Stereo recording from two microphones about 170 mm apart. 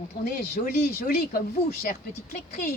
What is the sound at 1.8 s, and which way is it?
Speech, 55° left (ahead or behind).